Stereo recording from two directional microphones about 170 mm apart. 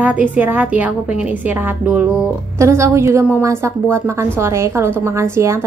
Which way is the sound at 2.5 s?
15° right (ahead or behind).